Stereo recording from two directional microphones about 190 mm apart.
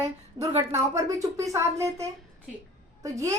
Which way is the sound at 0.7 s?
15° right (ahead or behind).